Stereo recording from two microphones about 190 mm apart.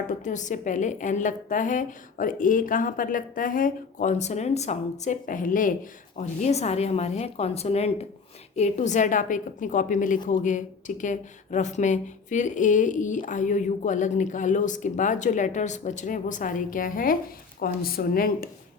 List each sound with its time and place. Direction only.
0.1 s a woman's voice: 40° left (ahead or behind)